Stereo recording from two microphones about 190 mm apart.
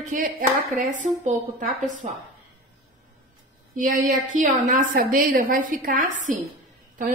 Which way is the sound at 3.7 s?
45° right (ahead or behind).